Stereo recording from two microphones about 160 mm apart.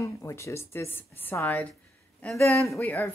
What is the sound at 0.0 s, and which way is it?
Speech, 20° left (ahead or behind).